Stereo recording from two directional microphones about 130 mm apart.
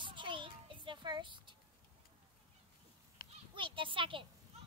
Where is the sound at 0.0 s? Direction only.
40° right (ahead or behind).